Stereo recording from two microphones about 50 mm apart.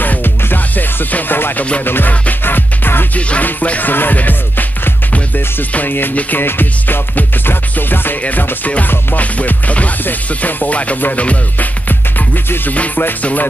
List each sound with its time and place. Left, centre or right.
0.0 s music: left
3.2 s music: left
8.2 s music: left
12.7 s music: left